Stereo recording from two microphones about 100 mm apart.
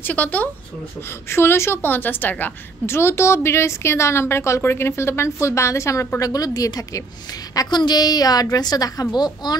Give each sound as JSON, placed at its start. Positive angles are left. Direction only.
{"t": 0.0, "sound": "a woman's voice", "side_deg": 15}